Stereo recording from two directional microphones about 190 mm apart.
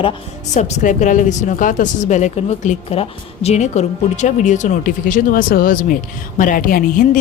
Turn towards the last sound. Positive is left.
turn(degrees=45)  # may be behind; listen again after turning